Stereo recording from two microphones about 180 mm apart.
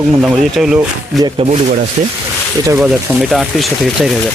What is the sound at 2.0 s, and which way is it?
Speech, 40° right (ahead or behind).